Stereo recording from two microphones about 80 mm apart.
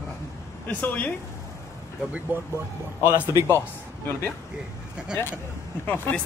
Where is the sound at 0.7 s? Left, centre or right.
Centre.